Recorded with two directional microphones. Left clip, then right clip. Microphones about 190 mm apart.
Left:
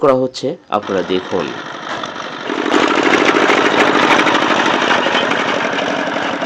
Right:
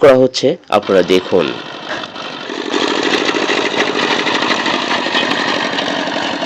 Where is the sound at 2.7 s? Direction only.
15° right (ahead or behind).